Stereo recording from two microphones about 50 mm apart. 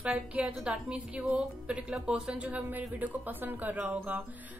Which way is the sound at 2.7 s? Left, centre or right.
Right.